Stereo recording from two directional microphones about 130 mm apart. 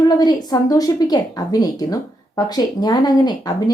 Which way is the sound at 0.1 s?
30° left (ahead or behind).